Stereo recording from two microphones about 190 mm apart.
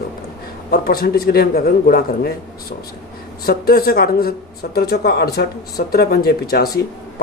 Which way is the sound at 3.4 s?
55° left (ahead or behind).